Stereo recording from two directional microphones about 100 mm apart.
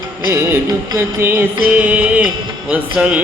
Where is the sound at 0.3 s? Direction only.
25° right (ahead or behind).